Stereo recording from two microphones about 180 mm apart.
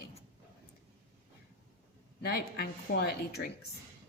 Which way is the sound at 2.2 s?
60° left (ahead or behind).